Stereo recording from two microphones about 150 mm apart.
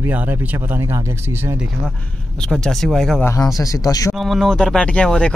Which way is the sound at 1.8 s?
5° left (ahead or behind).